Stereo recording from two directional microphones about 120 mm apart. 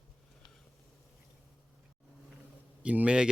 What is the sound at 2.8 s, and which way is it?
Speech, 10° right (ahead or behind).